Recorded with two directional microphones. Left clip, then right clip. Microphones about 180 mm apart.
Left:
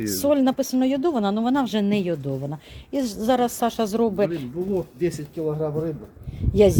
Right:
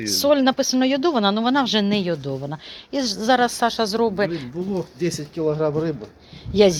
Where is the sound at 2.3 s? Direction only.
5° left (ahead or behind); by 4.4 s 20° left (ahead or behind).